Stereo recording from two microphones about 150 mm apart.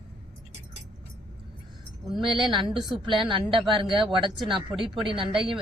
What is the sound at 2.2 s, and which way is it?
Speech, 30° right (ahead or behind).